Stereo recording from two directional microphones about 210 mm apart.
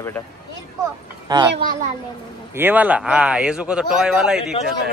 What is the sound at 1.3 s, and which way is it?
Speech, 20° right (ahead or behind).